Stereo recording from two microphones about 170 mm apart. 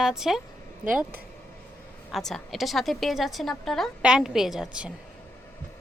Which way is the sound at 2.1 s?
Centre (ahead or behind).